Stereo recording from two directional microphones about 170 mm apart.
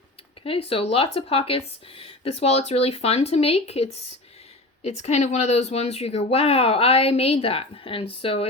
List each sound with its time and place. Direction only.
0.4 s speech: 35° left (ahead or behind)